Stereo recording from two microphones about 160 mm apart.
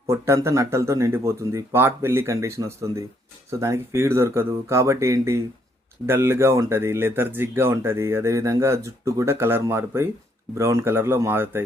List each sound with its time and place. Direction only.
0.1 s speech: 20° right (ahead or behind)